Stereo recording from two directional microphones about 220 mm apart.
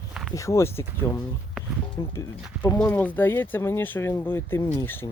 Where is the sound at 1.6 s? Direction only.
Centre (ahead or behind).